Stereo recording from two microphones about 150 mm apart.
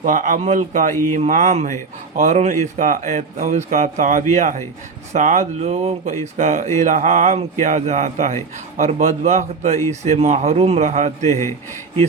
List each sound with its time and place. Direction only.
0.0 s speech: 55° right (ahead or behind)